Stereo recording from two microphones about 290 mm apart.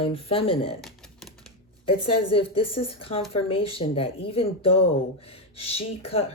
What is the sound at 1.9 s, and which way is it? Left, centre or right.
Speech, centre.